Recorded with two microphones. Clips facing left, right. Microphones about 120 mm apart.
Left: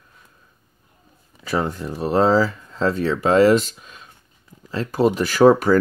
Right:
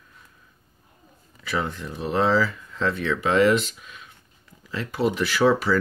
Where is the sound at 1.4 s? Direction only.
40° left (ahead or behind).